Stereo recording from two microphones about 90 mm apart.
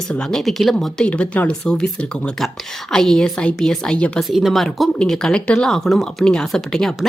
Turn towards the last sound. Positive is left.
turn(degrees=0)  # may be behind; listen again after turning